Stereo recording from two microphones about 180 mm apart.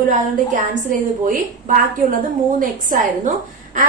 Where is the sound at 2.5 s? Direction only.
45° right (ahead or behind).